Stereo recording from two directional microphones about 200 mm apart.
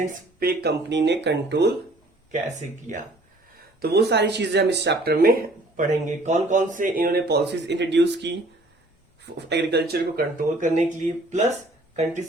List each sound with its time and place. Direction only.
0.0 s speech: 50° right (ahead or behind)
2.3 s speech: 40° right (ahead or behind)
3.8 s speech: 50° right (ahead or behind); by 11.4 s 35° right (ahead or behind)